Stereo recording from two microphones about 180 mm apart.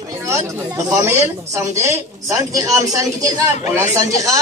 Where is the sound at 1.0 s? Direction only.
15° right (ahead or behind).